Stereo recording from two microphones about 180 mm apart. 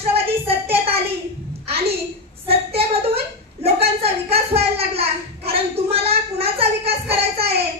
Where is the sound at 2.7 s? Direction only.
35° right (ahead or behind).